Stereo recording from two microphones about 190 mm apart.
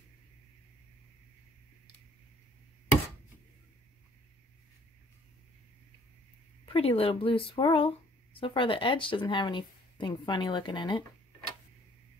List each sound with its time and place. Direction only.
6.6 s speech: 30° left (ahead or behind)